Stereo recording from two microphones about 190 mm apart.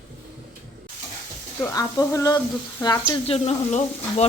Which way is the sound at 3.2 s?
35° left (ahead or behind).